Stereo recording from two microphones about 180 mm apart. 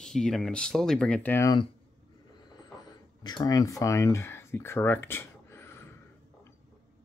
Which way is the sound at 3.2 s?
25° left (ahead or behind).